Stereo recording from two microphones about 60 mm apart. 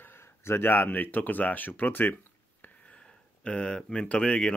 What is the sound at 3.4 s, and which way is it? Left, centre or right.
Speech, centre.